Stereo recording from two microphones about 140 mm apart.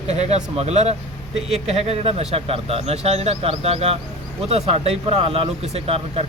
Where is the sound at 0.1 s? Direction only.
50° right (ahead or behind).